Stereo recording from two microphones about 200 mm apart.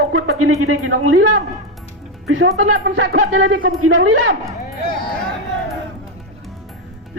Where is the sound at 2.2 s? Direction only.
90° right.